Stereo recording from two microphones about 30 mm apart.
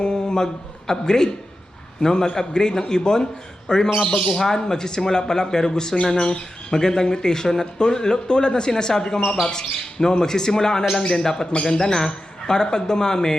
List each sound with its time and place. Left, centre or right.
0.0 s a man's voice: left
4.0 s speech: left
4.3 s speech: centre